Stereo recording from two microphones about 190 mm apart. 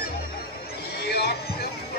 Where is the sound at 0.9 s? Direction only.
55° left (ahead or behind).